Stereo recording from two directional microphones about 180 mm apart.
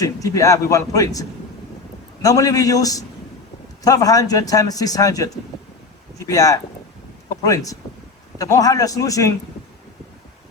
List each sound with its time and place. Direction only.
0.0 s speech: 20° left (ahead or behind)
2.2 s a man's voice: 20° left (ahead or behind)